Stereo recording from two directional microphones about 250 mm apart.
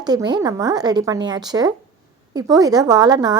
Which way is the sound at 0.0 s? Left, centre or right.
Centre.